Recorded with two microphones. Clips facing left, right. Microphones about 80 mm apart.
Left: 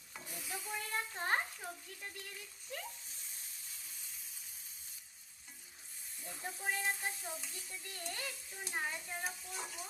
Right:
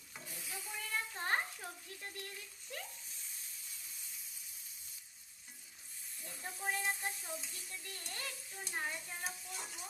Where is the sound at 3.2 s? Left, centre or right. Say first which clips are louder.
Even; left.